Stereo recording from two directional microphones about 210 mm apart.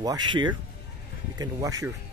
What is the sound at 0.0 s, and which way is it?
A man's voice, 20° right (ahead or behind).